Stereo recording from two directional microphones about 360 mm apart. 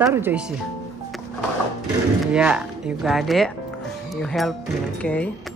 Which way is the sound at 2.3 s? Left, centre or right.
Centre.